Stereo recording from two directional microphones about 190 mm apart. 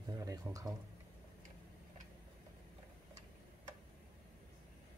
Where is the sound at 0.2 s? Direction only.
20° right (ahead or behind).